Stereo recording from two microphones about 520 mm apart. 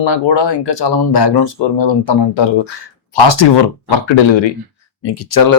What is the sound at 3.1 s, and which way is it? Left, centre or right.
Speech, left.